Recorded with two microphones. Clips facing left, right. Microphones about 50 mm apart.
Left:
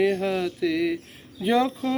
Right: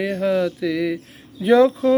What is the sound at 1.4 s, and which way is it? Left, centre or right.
Speech, centre.